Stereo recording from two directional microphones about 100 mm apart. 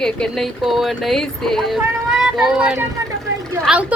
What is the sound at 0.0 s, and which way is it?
Speech, 5° left (ahead or behind).